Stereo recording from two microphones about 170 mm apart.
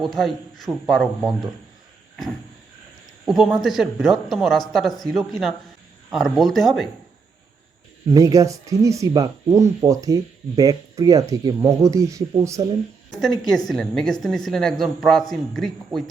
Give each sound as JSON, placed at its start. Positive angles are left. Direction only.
{"t": 0.0, "sound": "speech", "side_deg": 0}
{"t": 3.2, "sound": "speech", "side_deg": 0}
{"t": 8.1, "sound": "speech", "side_deg": -20}
{"t": 13.7, "sound": "speech", "side_deg": 0}